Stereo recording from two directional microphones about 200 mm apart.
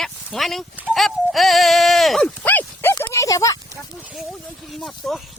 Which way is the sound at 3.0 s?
15° left (ahead or behind).